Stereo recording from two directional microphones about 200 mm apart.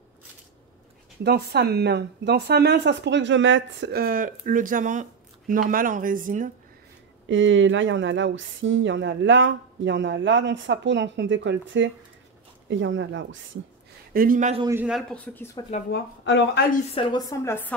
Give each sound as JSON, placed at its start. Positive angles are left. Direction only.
{"t": 1.2, "sound": "speech", "side_deg": -55}
{"t": 7.2, "sound": "speech", "side_deg": -70}
{"t": 14.1, "sound": "speech", "side_deg": -45}
{"t": 14.7, "sound": "speech", "side_deg": -5}
{"t": 15.9, "sound": "speech", "side_deg": 60}
{"t": 16.9, "sound": "speech", "side_deg": 20}